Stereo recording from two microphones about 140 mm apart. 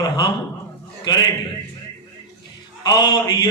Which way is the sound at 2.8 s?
30° left (ahead or behind).